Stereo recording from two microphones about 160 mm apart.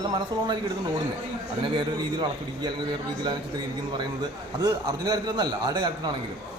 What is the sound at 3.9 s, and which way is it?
A man's voice, 25° right (ahead or behind).